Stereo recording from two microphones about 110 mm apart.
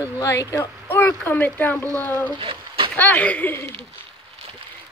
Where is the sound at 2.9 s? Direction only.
15° left (ahead or behind).